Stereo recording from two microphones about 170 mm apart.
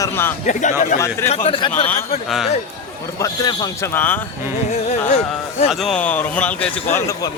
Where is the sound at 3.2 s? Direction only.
25° left (ahead or behind).